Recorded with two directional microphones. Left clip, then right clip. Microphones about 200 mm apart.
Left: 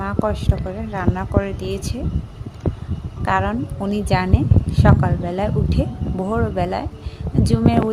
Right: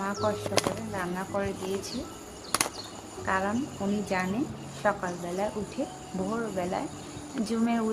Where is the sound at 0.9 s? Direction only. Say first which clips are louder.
Left 9 dB; 35° left (ahead or behind).